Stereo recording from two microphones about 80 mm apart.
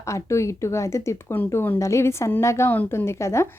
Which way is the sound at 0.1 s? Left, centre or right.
Left.